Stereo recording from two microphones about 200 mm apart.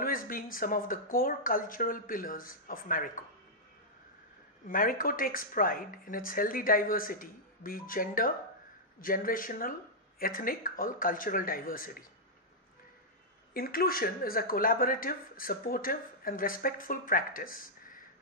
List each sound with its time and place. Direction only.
0.0 s speech: 45° left (ahead or behind)
4.6 s speech: 45° left (ahead or behind)
13.5 s speech: 50° left (ahead or behind)